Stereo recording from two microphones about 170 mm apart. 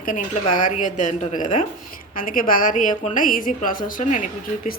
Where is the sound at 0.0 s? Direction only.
50° left (ahead or behind).